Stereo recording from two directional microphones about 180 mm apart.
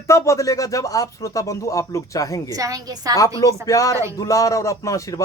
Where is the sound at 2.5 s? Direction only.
20° right (ahead or behind).